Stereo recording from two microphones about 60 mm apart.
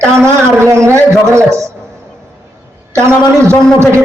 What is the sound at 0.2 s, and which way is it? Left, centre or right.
Music, right.